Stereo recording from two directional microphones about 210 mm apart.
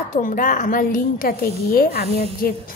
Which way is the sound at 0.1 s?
40° left (ahead or behind).